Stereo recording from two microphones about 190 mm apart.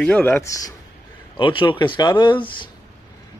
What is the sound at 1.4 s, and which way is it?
Speech, 25° left (ahead or behind).